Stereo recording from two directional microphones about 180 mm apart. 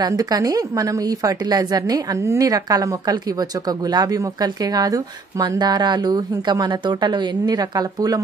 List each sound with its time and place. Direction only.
0.0 s a woman's voice: 20° right (ahead or behind)